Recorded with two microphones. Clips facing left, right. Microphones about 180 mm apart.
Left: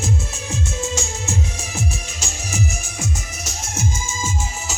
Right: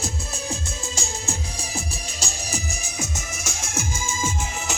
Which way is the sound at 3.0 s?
50° right (ahead or behind).